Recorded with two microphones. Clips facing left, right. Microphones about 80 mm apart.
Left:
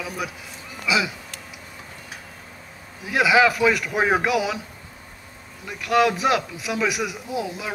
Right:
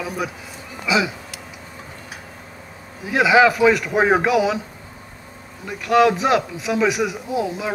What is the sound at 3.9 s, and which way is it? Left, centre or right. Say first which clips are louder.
Speech: right 4 dB; centre.